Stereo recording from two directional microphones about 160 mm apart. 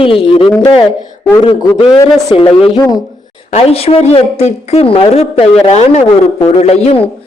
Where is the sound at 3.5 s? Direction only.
40° left (ahead or behind).